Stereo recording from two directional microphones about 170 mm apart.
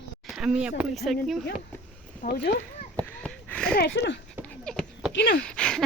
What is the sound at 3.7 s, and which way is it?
Speech, 75° left (ahead or behind).